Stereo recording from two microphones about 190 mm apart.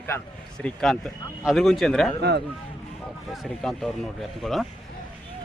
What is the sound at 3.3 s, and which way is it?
Speech, centre (ahead or behind).